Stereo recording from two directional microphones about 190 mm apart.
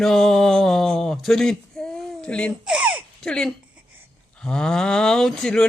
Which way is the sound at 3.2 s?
5° left (ahead or behind).